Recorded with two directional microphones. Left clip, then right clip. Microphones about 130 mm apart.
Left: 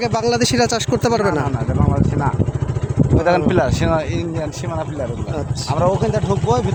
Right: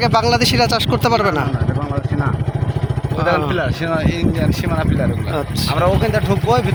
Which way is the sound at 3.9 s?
90° left.